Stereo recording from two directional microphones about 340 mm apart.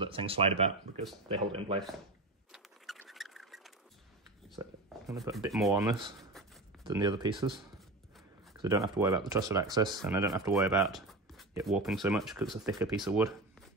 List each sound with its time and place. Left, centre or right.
0.0 s speech: centre
2.5 s rodents: centre
4.6 s speech: centre